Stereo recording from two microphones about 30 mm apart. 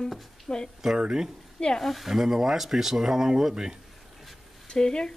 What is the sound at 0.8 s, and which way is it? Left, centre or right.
Speech, centre.